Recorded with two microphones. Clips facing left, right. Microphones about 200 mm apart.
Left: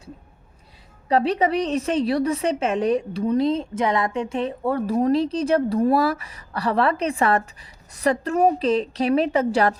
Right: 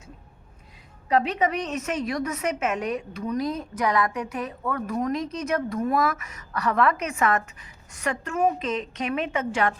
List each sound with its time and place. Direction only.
1.0 s a woman's voice: 35° left (ahead or behind)